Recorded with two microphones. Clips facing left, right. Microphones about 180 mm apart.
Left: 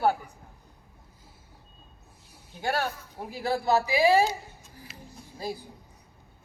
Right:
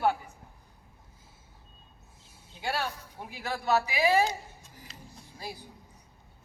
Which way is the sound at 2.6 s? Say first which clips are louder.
Left 4 dB; 45° left (ahead or behind).